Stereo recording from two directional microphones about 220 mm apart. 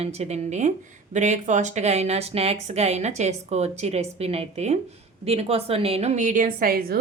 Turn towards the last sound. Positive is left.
turn(degrees=-40)  # may be behind; listen again after turning